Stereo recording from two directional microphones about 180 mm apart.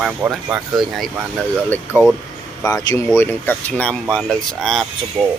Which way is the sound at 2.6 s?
20° left (ahead or behind).